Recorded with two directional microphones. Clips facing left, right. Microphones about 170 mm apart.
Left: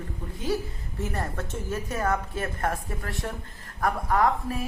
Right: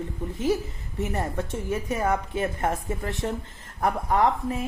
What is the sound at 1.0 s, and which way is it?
Speech, 20° right (ahead or behind).